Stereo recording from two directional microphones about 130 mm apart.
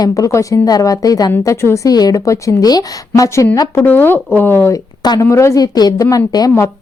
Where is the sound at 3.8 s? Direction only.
15° left (ahead or behind).